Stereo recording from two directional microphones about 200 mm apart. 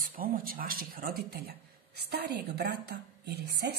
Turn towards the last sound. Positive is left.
turn(degrees=-55)  # may be behind; listen again after turning